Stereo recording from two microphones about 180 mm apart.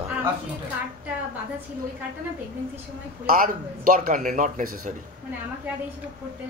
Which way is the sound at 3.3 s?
50° right (ahead or behind).